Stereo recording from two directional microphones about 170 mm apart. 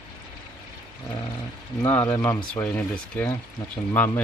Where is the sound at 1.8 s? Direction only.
10° left (ahead or behind).